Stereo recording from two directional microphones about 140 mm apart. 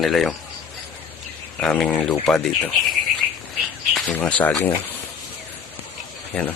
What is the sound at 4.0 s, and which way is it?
Speech, 5° left (ahead or behind).